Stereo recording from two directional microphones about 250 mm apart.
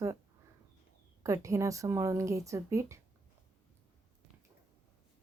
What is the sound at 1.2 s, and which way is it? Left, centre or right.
Speech, centre.